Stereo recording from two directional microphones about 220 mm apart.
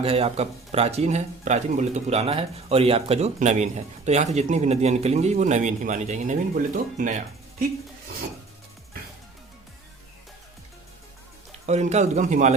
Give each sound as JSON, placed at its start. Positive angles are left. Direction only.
{"t": 0.0, "sound": "speech", "side_deg": -25}
{"t": 11.6, "sound": "speech", "side_deg": -30}